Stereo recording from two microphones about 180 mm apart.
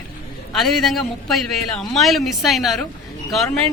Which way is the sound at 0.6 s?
Centre (ahead or behind).